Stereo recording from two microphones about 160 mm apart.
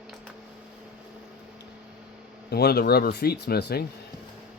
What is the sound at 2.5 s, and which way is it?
Speech, 80° left.